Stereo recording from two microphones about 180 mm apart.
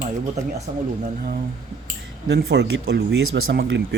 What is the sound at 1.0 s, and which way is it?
Speech, 55° right (ahead or behind).